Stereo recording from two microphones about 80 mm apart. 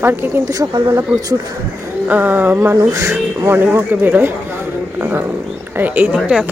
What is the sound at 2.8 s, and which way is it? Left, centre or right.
Speech, right.